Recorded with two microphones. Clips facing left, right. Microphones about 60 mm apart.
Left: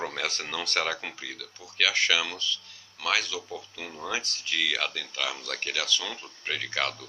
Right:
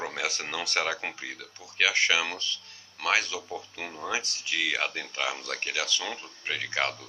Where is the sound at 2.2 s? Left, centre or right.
Right.